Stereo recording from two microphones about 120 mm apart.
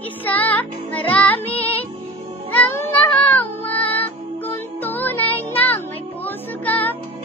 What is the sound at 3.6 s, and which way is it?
Music, 15° left (ahead or behind).